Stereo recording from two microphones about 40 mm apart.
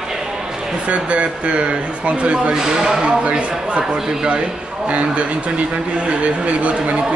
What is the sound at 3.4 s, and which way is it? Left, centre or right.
Speech, right.